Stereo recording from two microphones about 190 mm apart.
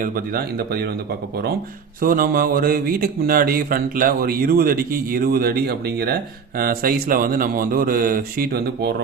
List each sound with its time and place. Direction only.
0.0 s speech: 50° right (ahead or behind)
2.0 s speech: 50° right (ahead or behind)